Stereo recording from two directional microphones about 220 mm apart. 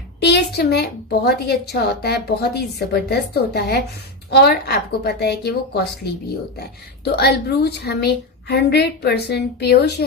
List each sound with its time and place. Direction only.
0.2 s a woman's voice: 50° left (ahead or behind)